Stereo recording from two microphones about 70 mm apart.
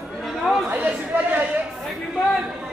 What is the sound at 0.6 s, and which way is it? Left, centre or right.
Speech, right.